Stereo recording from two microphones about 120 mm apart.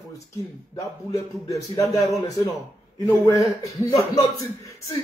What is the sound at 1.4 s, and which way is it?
Speech, 30° left (ahead or behind).